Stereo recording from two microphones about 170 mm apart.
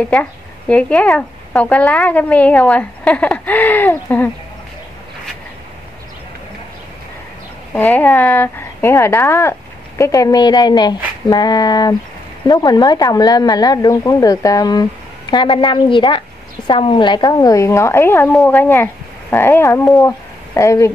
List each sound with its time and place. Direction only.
0.0 s speech: 5° left (ahead or behind)
7.7 s speech: 10° left (ahead or behind)